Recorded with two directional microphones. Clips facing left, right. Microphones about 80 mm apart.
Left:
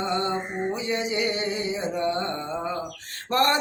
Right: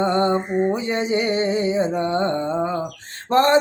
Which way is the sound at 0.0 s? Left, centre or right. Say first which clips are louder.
Right 7 dB; right.